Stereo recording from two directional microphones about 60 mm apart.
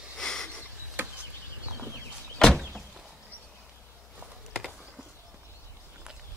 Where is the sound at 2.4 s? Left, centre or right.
Centre.